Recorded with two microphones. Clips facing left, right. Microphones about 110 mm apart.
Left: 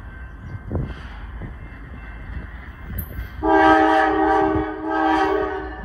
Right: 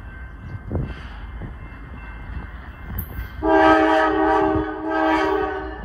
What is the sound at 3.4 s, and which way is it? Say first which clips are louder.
Train: even; 15° left (ahead or behind).